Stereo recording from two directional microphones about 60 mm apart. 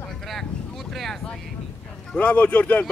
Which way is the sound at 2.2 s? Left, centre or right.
Left.